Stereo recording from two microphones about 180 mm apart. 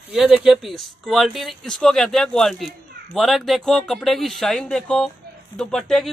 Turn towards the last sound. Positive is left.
turn(degrees=0)  # may be behind; listen again after turning